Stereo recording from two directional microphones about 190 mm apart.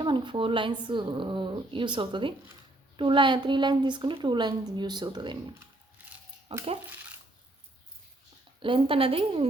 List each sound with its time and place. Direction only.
0.0 s speech: 25° right (ahead or behind)
8.6 s speech: 30° right (ahead or behind)